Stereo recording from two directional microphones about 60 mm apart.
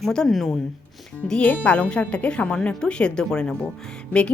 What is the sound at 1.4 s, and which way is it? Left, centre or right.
A woman's voice, left.